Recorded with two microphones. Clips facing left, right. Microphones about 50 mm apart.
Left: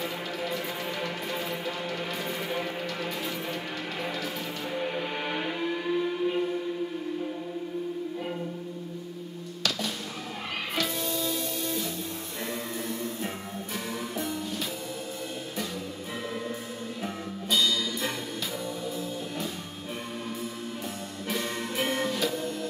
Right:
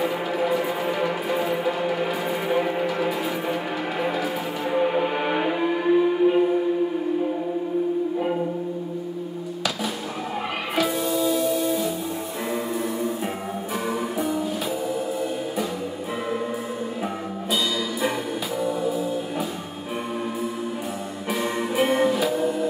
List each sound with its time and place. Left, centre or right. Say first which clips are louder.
0.0 s music: right 9 dB; centre
10.8 s music: right 9 dB; centre
18.6 s music: right 9 dB; centre
21.3 s music: right 7 dB; centre